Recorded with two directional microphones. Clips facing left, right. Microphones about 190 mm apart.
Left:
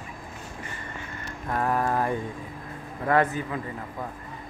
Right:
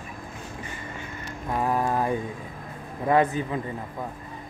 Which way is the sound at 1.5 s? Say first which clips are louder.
Right 1 dB; 10° right (ahead or behind).